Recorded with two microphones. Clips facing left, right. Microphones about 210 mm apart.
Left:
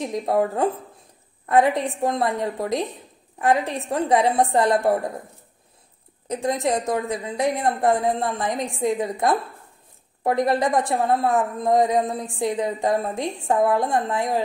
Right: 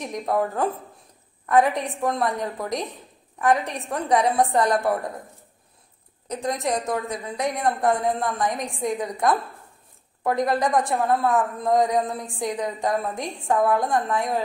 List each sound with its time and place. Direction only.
0.0 s a woman's voice: 30° left (ahead or behind)
1.7 s a woman's voice: centre (ahead or behind)
2.0 s a woman's voice: 25° left (ahead or behind)
6.2 s a woman's voice: 30° left (ahead or behind)